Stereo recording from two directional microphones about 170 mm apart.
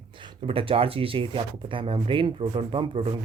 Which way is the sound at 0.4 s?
30° right (ahead or behind).